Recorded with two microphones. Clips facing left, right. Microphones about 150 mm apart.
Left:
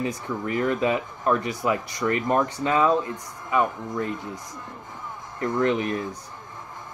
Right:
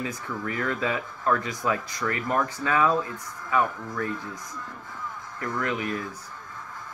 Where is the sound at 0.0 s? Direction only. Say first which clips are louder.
Left 4 dB; 20° left (ahead or behind).